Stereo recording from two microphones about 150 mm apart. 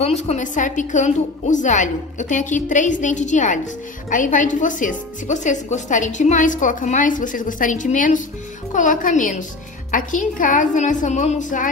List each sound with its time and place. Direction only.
0.0 s speech: 45° left (ahead or behind)